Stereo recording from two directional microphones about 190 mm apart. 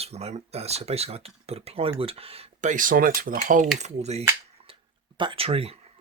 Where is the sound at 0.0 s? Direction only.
35° right (ahead or behind).